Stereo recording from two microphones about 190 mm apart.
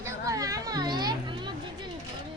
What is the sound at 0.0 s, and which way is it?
Children playing, 15° right (ahead or behind).